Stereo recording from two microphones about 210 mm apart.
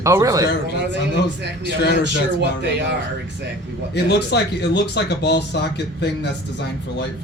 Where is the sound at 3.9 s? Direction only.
50° left (ahead or behind).